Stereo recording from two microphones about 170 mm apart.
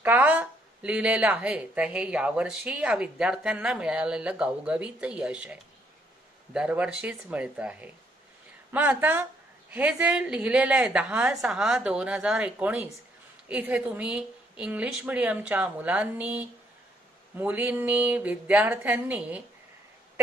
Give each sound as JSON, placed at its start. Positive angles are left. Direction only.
{"t": 0.0, "sound": "a woman's voice", "side_deg": -10}